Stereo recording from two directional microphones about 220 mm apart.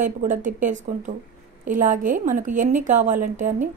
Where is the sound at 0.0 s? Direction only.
35° right (ahead or behind).